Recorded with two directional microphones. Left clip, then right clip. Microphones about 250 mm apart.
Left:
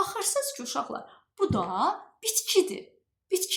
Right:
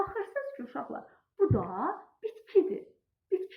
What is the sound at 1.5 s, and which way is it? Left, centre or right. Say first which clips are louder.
Speech: left 4 dB; left.